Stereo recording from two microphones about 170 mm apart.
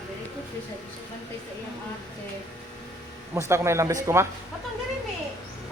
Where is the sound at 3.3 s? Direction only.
15° right (ahead or behind).